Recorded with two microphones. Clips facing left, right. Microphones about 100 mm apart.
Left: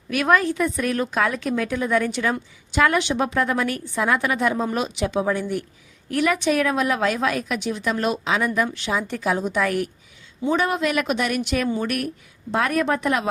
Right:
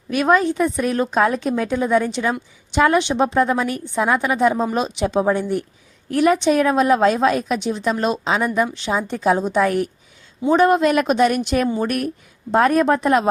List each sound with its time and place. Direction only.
0.1 s a woman's voice: 25° right (ahead or behind)